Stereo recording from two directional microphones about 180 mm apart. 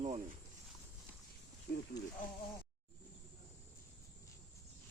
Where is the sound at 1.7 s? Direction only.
55° left (ahead or behind).